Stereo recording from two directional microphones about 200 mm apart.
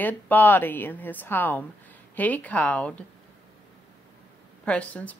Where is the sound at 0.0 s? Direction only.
10° left (ahead or behind).